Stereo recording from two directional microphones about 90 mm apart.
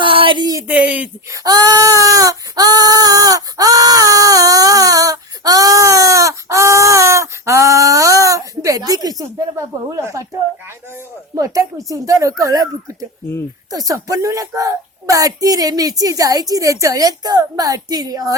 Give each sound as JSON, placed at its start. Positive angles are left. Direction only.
{"t": 0.0, "sound": "a sound", "side_deg": -70}
{"t": 0.7, "sound": "speech", "side_deg": -15}
{"t": 1.3, "sound": "baby cry", "side_deg": -45}
{"t": 11.3, "sound": "a woman's voice", "side_deg": -40}